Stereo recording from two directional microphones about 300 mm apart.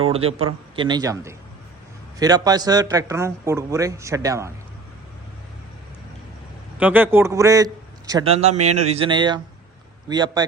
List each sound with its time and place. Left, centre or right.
0.0 s a man's voice: centre
6.7 s a man's voice: centre; by 8.5 s right
8.5 s speech: right
8.9 s a man's voice: centre